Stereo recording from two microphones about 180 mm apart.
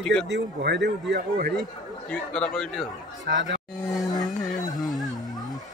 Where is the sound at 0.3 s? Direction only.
70° right (ahead or behind).